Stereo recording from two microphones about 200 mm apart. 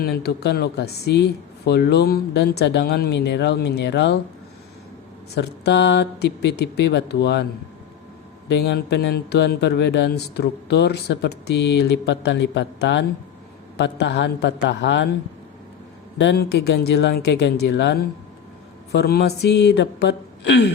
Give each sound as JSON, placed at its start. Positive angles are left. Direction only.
{"t": 0.0, "sound": "a man's voice", "side_deg": 50}
{"t": 5.3, "sound": "a man's voice", "side_deg": 55}
{"t": 8.4, "sound": "a man's voice", "side_deg": 55}
{"t": 16.1, "sound": "a man's voice", "side_deg": 60}